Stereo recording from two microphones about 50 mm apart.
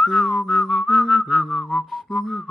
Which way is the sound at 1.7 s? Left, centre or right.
Centre.